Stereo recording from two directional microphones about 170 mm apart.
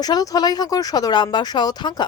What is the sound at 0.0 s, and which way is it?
A woman's voice, 20° left (ahead or behind).